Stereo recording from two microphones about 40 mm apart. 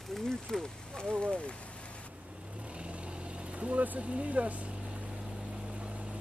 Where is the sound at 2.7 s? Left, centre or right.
Right.